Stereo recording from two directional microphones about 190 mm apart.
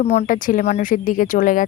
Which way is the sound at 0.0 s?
35° left (ahead or behind).